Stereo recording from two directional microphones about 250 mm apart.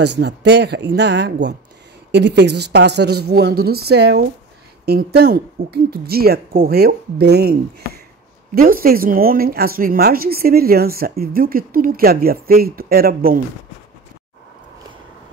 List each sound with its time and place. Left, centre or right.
0.0 s a woman's voice: right